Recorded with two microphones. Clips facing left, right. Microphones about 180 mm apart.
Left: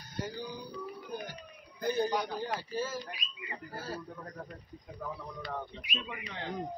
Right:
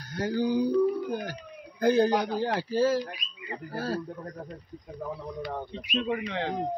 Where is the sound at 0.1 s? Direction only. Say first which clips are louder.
Right 13 dB; 80° right.